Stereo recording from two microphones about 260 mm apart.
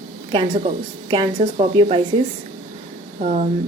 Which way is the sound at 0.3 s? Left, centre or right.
Centre.